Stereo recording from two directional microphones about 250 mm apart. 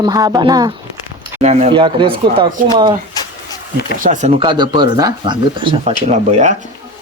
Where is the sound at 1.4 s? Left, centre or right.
Right.